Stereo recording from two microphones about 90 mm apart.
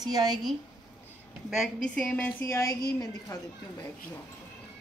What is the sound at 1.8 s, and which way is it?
Speech, 10° left (ahead or behind).